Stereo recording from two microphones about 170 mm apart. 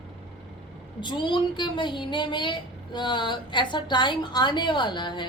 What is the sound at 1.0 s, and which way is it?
A woman's voice, 25° left (ahead or behind).